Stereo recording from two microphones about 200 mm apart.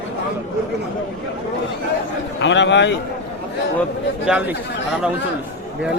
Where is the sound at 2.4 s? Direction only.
65° left (ahead or behind).